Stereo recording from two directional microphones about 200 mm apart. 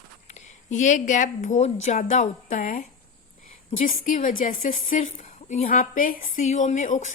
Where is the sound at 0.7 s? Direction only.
40° left (ahead or behind).